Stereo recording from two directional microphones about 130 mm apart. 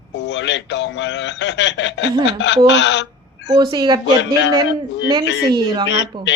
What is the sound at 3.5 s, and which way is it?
A woman's voice, 35° right (ahead or behind).